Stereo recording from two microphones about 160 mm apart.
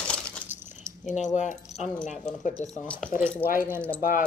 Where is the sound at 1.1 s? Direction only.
45° left (ahead or behind).